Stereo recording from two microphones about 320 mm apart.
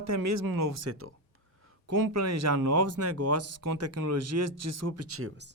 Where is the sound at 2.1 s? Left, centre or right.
Right.